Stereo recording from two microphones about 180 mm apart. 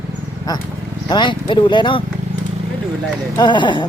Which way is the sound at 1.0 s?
25° left (ahead or behind).